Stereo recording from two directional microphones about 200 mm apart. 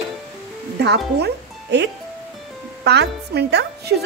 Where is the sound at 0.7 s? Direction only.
55° right (ahead or behind).